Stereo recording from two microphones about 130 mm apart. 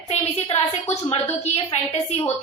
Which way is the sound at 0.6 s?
50° left (ahead or behind).